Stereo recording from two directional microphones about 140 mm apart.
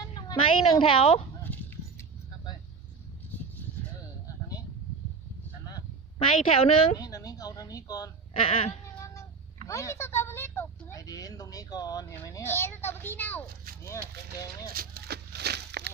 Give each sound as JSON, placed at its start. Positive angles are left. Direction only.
{"t": 0.0, "sound": "speech", "side_deg": 30}
{"t": 1.5, "sound": "horse", "side_deg": 10}
{"t": 6.1, "sound": "a woman's voice", "side_deg": 45}
{"t": 7.0, "sound": "a sound", "side_deg": 25}
{"t": 8.3, "sound": "a woman's voice", "side_deg": 40}
{"t": 9.0, "sound": "cat", "side_deg": 20}
{"t": 9.6, "sound": "speech", "side_deg": 20}
{"t": 13.8, "sound": "speech", "side_deg": 25}
{"t": 14.7, "sound": "speech", "side_deg": -90}